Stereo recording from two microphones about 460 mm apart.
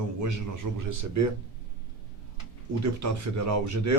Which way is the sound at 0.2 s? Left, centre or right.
Right.